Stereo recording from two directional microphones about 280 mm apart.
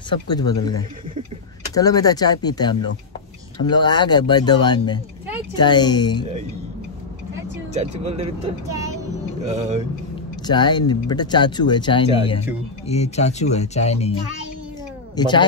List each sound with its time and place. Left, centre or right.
0.1 s speech: centre
7.7 s speech: right
9.5 s speech: right
10.4 s speech: centre
15.1 s speech: centre